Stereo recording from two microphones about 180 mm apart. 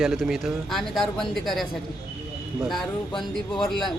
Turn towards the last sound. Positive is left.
turn(degrees=0)  # may be behind; listen again after turning